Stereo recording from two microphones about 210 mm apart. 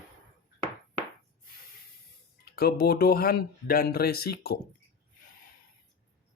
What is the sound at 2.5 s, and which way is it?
Speech, 45° left (ahead or behind).